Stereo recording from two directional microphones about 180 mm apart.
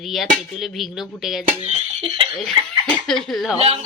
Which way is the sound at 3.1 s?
Centre (ahead or behind).